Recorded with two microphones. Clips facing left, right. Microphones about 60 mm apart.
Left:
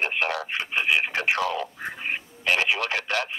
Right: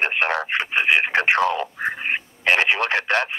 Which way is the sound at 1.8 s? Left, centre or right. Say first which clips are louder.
Right 6 dB; right.